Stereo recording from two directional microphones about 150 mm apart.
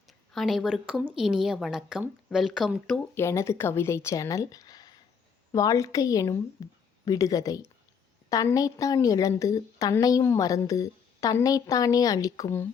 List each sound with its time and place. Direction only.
0.3 s a woman's voice: centre (ahead or behind)
3.2 s a woman's voice: 20° left (ahead or behind)